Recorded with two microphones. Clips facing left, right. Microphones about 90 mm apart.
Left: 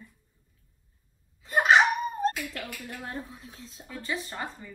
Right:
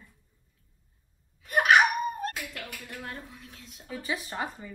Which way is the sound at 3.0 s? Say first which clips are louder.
Left 3 dB; 30° left (ahead or behind).